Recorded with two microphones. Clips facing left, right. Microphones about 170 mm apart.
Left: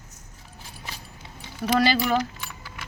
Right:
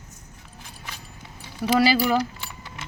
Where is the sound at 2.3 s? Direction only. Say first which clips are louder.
Right 1 dB; 25° right (ahead or behind).